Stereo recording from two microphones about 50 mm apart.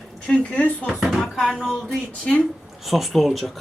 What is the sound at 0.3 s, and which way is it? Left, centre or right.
Speech, centre.